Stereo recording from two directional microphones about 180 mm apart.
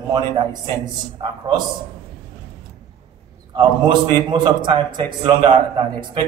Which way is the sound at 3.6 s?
25° right (ahead or behind).